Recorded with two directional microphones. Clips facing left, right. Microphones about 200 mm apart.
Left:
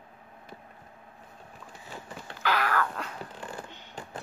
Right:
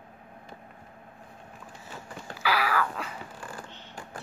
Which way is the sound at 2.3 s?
10° right (ahead or behind).